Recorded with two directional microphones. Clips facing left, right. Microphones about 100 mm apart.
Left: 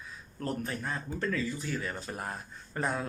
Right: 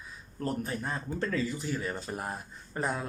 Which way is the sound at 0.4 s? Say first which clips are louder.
Right 1 dB; 25° right (ahead or behind).